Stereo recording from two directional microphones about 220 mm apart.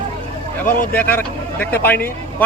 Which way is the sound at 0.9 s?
5° left (ahead or behind).